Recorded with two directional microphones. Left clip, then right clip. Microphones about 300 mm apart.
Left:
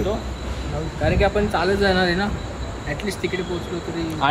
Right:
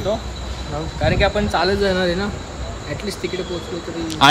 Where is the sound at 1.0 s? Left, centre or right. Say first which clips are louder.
Right 2 dB; right.